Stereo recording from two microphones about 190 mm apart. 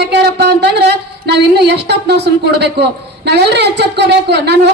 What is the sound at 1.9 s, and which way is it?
Speech, 60° right (ahead or behind).